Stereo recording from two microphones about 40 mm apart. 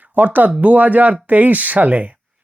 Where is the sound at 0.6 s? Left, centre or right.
Right.